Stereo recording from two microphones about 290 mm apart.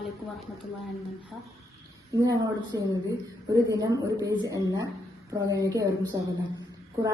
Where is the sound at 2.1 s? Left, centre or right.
Centre.